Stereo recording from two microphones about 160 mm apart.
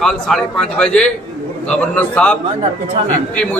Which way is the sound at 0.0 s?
Centre (ahead or behind).